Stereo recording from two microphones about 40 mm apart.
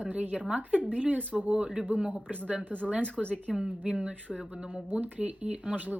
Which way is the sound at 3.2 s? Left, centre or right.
Centre.